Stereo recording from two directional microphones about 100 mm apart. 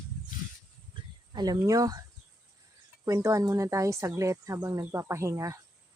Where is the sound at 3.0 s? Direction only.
35° right (ahead or behind).